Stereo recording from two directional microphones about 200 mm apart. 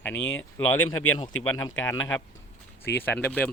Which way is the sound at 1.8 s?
15° left (ahead or behind).